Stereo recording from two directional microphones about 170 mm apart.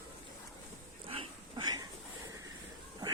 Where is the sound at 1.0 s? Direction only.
30° right (ahead or behind).